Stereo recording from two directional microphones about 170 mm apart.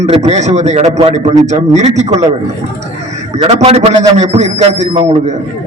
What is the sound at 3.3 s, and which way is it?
A man's voice, 35° right (ahead or behind).